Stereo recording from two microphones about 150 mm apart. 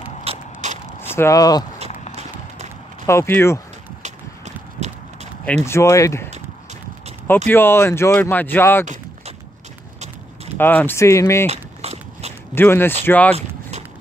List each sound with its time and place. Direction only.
0.2 s a sound: 50° right (ahead or behind)
1.0 s speech: 15° left (ahead or behind)
3.1 s speech: 15° left (ahead or behind)
4.7 s clip-clop: 50° right (ahead or behind)
5.7 s speech: 20° left (ahead or behind)
7.4 s speech: 15° left (ahead or behind)
10.6 s speech: 10° left (ahead or behind)
11.4 s walk: 45° right (ahead or behind)
12.5 s speech: 15° left (ahead or behind)
13.3 s vehicle: 45° right (ahead or behind)